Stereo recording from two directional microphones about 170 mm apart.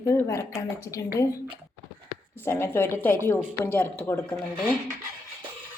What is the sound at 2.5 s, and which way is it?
Speech, 15° left (ahead or behind).